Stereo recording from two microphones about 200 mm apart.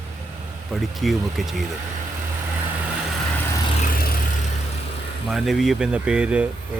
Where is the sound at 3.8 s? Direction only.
45° left (ahead or behind).